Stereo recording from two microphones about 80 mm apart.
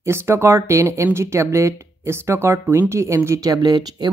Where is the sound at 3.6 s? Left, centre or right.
Right.